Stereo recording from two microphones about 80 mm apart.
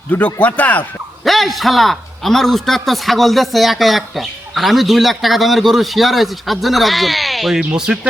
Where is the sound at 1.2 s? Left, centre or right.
Centre.